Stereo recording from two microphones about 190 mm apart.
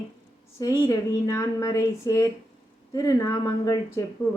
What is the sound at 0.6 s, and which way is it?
Speech, 20° left (ahead or behind).